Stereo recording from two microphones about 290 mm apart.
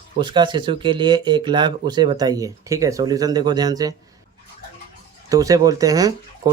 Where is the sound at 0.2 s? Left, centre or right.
Centre.